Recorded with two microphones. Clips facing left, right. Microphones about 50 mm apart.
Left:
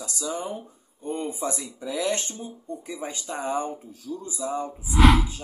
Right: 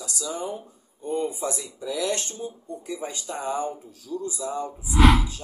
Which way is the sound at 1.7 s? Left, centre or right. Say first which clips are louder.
Even; left.